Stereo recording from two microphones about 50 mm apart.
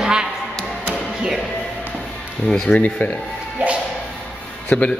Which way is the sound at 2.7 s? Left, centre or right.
Left.